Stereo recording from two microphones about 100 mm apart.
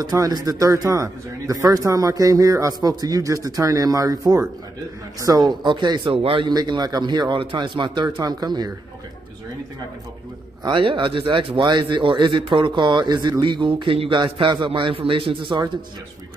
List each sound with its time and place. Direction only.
0.0 s a man's voice: 40° right (ahead or behind)
6.1 s a man's voice: 65° right (ahead or behind)
6.5 s speech: 45° right (ahead or behind)
10.6 s a man's voice: 55° right (ahead or behind)
14.2 s a man's voice: 50° right (ahead or behind)